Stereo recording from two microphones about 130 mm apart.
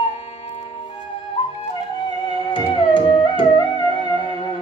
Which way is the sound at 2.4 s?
40° left (ahead or behind).